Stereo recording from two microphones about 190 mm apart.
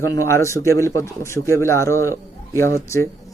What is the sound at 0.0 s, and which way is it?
Speech, 15° left (ahead or behind).